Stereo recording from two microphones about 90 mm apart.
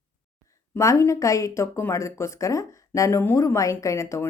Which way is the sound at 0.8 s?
35° left (ahead or behind).